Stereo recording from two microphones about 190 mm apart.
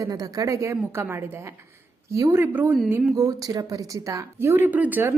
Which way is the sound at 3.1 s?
20° right (ahead or behind).